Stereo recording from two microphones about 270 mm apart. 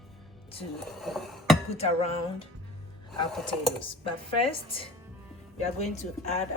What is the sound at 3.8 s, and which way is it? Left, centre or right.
Speech, centre.